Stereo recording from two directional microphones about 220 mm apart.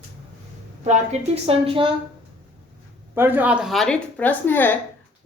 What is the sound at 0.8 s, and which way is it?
A woman's voice, 30° right (ahead or behind).